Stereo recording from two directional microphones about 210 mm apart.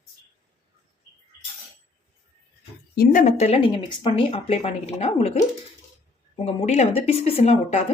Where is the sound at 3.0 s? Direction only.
35° left (ahead or behind).